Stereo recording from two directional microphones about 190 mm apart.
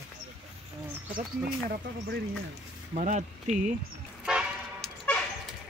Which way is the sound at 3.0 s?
40° right (ahead or behind).